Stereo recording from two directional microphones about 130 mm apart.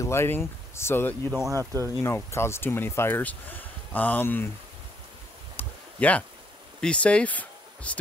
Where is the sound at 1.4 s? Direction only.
25° right (ahead or behind).